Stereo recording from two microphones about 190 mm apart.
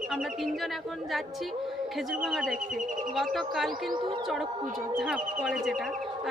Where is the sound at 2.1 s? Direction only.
Centre (ahead or behind).